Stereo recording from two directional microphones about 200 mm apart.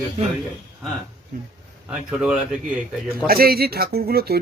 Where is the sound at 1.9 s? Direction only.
5° right (ahead or behind).